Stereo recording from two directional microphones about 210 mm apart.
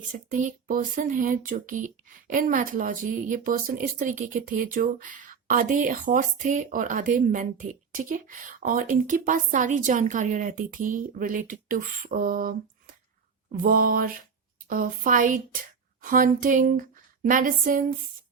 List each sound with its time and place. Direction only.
0.1 s speech: 35° right (ahead or behind)